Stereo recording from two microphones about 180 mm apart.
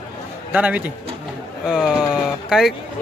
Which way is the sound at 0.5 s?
5° right (ahead or behind).